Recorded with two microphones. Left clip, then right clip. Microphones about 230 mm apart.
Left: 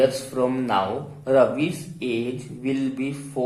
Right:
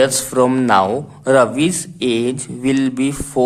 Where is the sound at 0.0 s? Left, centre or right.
Right.